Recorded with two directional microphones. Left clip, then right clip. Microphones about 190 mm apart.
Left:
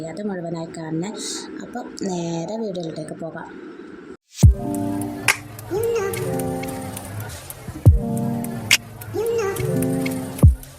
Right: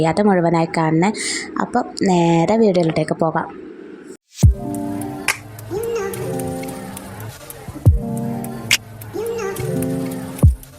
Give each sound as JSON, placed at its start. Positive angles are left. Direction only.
{"t": 0.0, "sound": "a woman's voice", "side_deg": -45}
{"t": 4.4, "sound": "music", "side_deg": 0}
{"t": 7.9, "sound": "music", "side_deg": 0}